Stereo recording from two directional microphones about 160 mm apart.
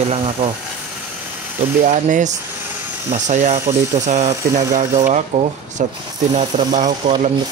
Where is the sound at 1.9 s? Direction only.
50° right (ahead or behind).